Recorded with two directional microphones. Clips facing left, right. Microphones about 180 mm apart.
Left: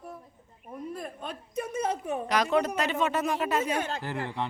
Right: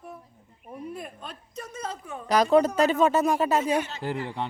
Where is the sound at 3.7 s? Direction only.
50° left (ahead or behind).